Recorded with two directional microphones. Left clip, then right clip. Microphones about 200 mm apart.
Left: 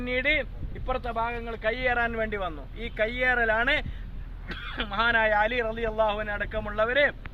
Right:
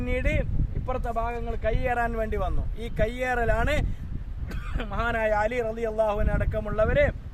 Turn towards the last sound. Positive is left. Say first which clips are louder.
# even
turn(degrees=-55)  # may be behind; listen again after turning